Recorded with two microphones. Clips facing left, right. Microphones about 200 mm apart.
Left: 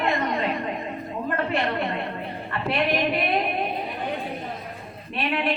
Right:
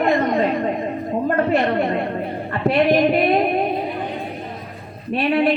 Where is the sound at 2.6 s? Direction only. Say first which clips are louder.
Right 9 dB; 40° right (ahead or behind).